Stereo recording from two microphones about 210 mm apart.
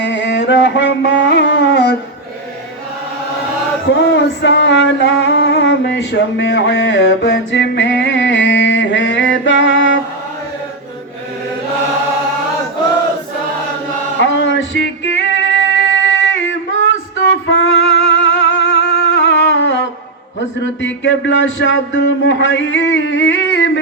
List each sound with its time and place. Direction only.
0.0 s carnatic music: 60° left (ahead or behind)
3.8 s music: 55° left (ahead or behind)
14.2 s music: 60° left (ahead or behind)
16.3 s singing: 65° left (ahead or behind)
17.4 s music: 60° left (ahead or behind)
20.8 s speech: 60° left (ahead or behind)